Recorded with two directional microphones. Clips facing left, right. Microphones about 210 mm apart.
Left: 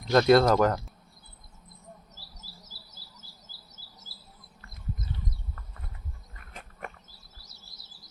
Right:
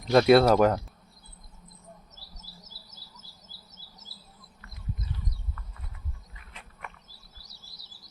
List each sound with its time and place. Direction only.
0.1 s speech: 10° right (ahead or behind)
6.3 s insect: 45° left (ahead or behind)